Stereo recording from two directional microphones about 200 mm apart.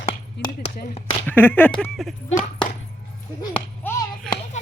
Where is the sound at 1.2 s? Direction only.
10° left (ahead or behind).